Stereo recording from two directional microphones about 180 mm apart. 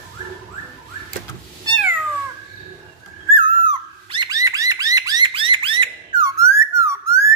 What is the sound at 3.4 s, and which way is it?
Bird, 25° right (ahead or behind).